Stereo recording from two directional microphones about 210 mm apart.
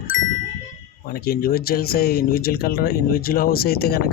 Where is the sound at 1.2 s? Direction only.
45° left (ahead or behind).